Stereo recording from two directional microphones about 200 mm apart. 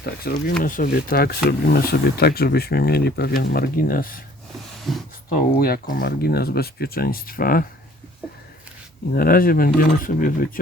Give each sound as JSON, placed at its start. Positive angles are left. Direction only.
{"t": 0.0, "sound": "speech", "side_deg": 50}
{"t": 4.9, "sound": "speech", "side_deg": 0}
{"t": 5.3, "sound": "speech", "side_deg": 50}
{"t": 9.1, "sound": "speech", "side_deg": 45}